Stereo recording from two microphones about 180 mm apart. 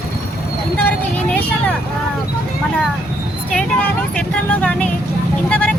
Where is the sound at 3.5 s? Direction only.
5° left (ahead or behind).